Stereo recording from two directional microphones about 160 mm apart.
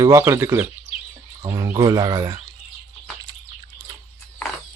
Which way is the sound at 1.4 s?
20° right (ahead or behind).